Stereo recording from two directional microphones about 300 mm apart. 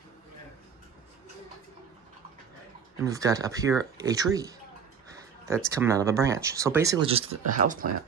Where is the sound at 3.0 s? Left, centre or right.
Centre.